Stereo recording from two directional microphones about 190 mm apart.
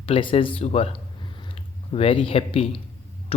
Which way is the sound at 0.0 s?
30° left (ahead or behind).